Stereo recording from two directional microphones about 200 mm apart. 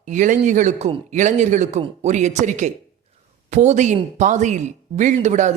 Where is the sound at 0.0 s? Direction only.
40° right (ahead or behind).